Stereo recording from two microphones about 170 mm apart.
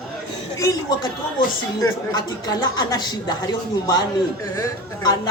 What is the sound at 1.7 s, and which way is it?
A woman's voice, 20° left (ahead or behind).